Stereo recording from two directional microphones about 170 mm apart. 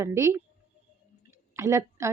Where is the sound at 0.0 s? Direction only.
15° right (ahead or behind).